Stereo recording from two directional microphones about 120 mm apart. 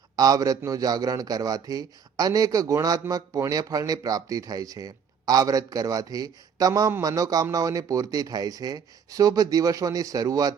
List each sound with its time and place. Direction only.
0.2 s a man's voice: 30° right (ahead or behind)